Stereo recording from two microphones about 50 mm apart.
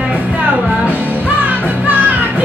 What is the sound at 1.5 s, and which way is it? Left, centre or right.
Music, right.